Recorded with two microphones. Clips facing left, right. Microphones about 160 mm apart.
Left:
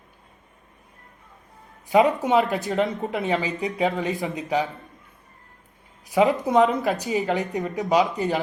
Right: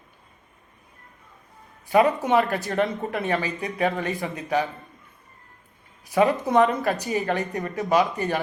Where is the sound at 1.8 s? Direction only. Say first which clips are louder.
Left 1 dB; 20° left (ahead or behind).